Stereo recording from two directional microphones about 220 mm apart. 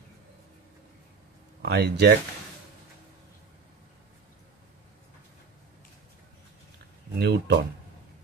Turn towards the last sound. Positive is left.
turn(degrees=-50)  # may be behind; listen again after turning